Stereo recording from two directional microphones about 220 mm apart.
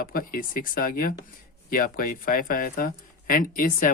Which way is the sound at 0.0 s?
40° left (ahead or behind).